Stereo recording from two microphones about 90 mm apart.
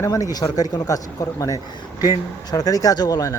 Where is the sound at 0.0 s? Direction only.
40° left (ahead or behind).